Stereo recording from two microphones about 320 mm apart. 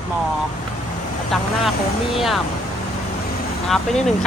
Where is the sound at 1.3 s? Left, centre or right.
Centre.